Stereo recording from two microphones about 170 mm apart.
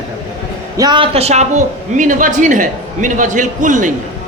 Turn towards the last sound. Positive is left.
turn(degrees=-50)  # may be behind; listen again after turning